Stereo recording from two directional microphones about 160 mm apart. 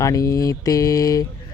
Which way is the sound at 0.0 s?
20° left (ahead or behind).